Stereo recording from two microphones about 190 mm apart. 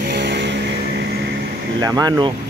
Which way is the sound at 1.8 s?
20° right (ahead or behind).